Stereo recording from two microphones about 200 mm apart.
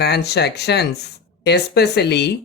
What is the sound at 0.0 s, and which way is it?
A woman's voice, 55° left (ahead or behind).